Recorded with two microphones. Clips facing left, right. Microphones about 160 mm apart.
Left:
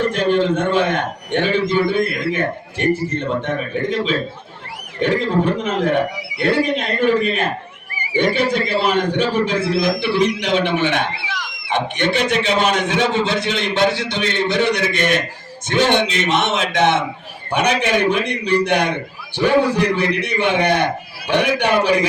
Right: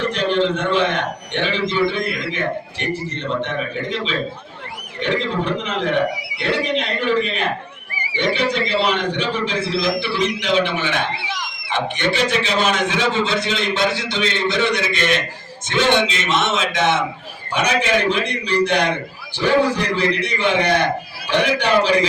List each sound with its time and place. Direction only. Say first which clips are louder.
0.0 s a man's voice: left 2 dB; 45° left (ahead or behind)
20.2 s a man's voice: left 1 dB; 60° left (ahead or behind)